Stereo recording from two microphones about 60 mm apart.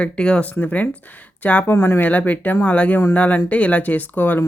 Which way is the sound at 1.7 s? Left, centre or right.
Left.